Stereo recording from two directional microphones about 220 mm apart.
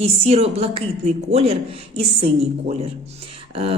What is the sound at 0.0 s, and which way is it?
A woman's voice, 30° right (ahead or behind).